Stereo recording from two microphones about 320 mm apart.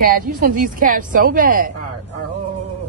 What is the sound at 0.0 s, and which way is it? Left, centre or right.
Speech, right.